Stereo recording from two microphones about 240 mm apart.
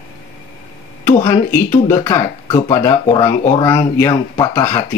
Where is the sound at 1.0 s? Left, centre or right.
Centre.